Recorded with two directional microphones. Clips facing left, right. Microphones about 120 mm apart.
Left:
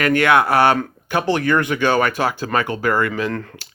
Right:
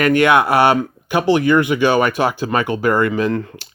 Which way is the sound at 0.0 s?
20° right (ahead or behind).